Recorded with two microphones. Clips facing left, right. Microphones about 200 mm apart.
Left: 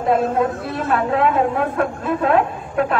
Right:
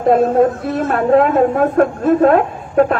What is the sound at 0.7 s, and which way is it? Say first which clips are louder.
A woman's voice: right 7 dB; 45° right (ahead or behind).